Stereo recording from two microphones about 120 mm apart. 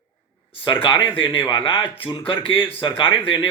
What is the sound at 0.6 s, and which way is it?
A man's voice, 45° left (ahead or behind).